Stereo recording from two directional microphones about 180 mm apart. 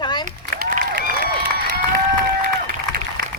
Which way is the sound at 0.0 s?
25° left (ahead or behind).